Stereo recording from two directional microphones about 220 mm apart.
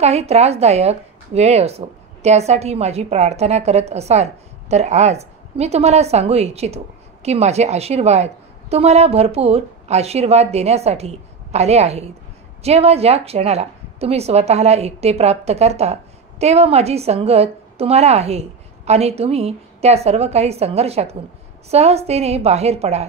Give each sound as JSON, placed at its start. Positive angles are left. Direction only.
{"t": 0.0, "sound": "speech", "side_deg": -30}